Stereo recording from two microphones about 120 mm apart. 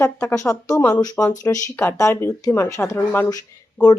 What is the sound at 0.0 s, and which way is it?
Speech, 20° left (ahead or behind).